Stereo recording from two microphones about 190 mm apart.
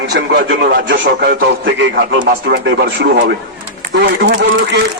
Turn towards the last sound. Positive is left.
turn(degrees=-60)  # may be behind; listen again after turning